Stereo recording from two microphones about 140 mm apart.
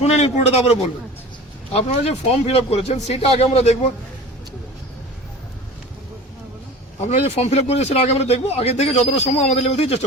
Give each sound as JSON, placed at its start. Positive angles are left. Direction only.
{"t": 0.0, "sound": "a man's voice", "side_deg": 50}
{"t": 7.1, "sound": "a man's voice", "side_deg": 50}